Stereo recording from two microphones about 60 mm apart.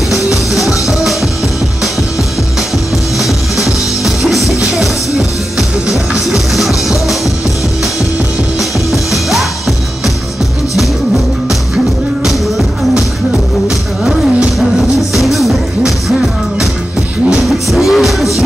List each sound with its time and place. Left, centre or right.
0.6 s music: centre
3.2 s music: centre
4.4 s music: left
5.6 s music: centre
8.5 s music: centre
12.3 s music: centre
15.1 s music: centre